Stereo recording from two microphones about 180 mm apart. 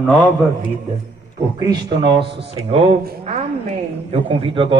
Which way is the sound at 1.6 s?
25° right (ahead or behind).